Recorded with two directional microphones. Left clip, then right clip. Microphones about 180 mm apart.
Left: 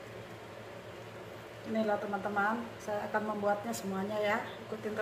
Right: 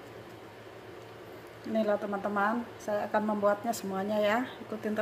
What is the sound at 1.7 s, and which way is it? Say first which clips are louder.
A woman's voice: right 3 dB; 55° right (ahead or behind).